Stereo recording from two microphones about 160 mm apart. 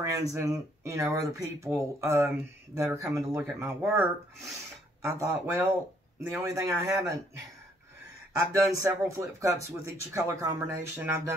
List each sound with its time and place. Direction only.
0.0 s speech: 20° right (ahead or behind)
8.5 s speech: 20° right (ahead or behind)